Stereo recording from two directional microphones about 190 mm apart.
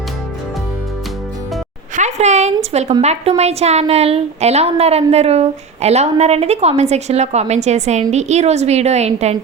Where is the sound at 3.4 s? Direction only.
35° right (ahead or behind).